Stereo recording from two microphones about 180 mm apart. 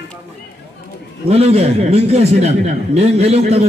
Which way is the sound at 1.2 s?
35° right (ahead or behind).